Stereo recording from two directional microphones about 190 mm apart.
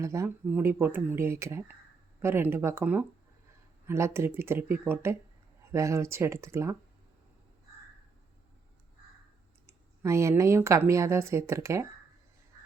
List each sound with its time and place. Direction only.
0.0 s speech: 15° right (ahead or behind)
9.6 s speech: 15° right (ahead or behind)